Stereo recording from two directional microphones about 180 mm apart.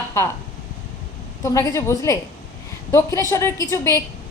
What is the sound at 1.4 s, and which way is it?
A woman's voice, 15° left (ahead or behind).